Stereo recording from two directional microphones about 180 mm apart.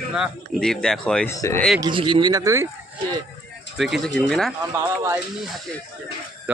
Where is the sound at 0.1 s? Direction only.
Centre (ahead or behind).